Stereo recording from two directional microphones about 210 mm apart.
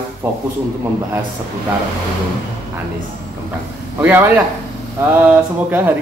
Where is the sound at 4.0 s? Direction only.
10° right (ahead or behind).